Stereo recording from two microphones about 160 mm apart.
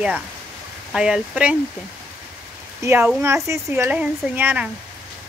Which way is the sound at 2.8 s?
15° right (ahead or behind).